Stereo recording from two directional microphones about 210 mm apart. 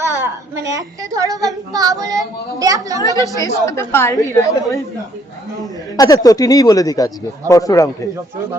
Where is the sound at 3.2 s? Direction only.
15° left (ahead or behind).